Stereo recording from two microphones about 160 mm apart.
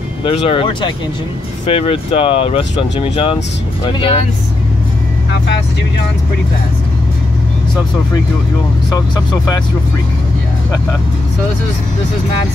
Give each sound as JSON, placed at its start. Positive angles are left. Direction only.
{"t": 0.2, "sound": "speech", "side_deg": 35}